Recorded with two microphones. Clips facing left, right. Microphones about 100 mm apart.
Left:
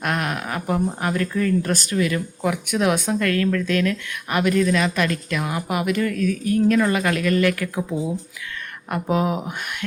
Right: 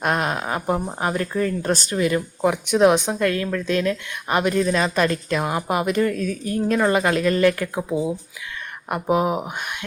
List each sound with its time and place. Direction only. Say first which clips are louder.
0.0 s a woman's voice: right 2 dB; 25° right (ahead or behind)